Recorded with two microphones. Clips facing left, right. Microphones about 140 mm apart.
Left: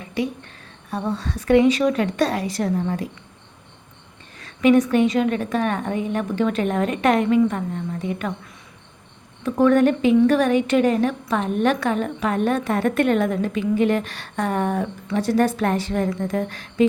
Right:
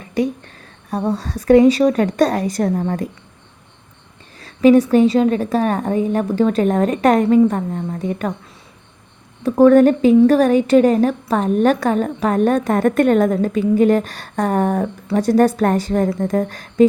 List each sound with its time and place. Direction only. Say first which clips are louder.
0.0 s speech: right 5 dB; 40° right (ahead or behind)
4.4 s speech: right 5 dB; 35° right (ahead or behind)
9.4 s speech: right 6 dB; 40° right (ahead or behind)